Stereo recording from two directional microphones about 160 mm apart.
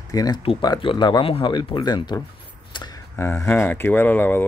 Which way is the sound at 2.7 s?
25° left (ahead or behind).